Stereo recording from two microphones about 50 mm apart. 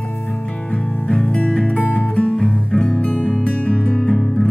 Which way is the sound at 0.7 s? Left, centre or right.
Centre.